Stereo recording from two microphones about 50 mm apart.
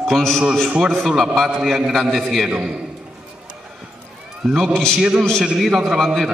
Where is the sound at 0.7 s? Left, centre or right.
Centre.